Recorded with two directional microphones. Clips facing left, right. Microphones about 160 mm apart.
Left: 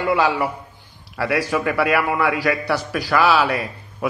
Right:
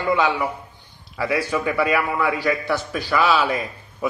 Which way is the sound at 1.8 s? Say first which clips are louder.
Left 2 dB; 5° left (ahead or behind).